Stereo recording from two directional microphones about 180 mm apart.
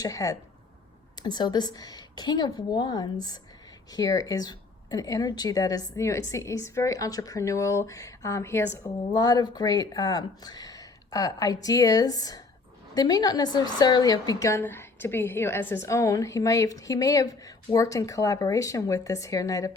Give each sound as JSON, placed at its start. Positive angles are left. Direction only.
{"t": 0.0, "sound": "a woman's voice", "side_deg": 20}